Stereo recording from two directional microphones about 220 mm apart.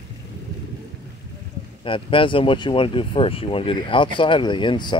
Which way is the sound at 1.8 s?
25° left (ahead or behind).